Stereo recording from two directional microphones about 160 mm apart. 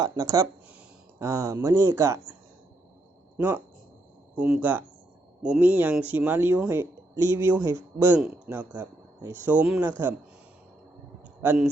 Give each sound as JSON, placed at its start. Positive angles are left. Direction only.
{"t": 0.0, "sound": "speech", "side_deg": -20}
{"t": 3.3, "sound": "speech", "side_deg": -15}
{"t": 11.4, "sound": "speech", "side_deg": -10}